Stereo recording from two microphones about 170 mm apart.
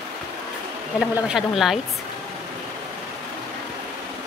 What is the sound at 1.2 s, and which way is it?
Speech, centre (ahead or behind).